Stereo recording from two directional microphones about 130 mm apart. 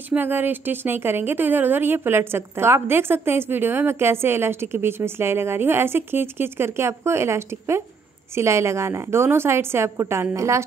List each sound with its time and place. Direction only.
0.1 s a woman's voice: 15° right (ahead or behind)